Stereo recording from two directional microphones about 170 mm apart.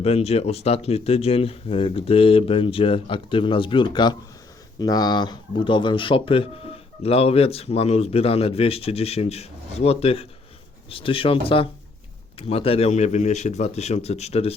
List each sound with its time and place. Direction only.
0.0 s speech: 35° left (ahead or behind)